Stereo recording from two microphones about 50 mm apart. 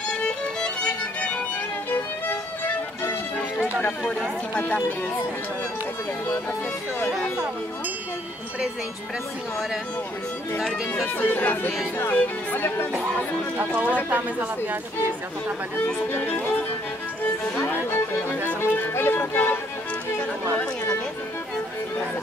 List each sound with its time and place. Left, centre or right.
0.1 s music: centre
1.9 s music: left
11.1 s speech: left
13.6 s speech: right
17.6 s speech: left
18.9 s music: left